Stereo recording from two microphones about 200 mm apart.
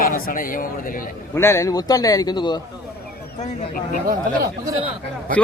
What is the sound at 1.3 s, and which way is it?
A man's voice, 15° left (ahead or behind).